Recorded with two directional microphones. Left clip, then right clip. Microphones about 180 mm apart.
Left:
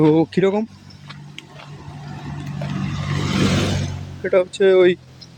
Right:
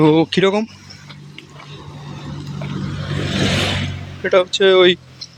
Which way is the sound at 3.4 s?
40° left (ahead or behind).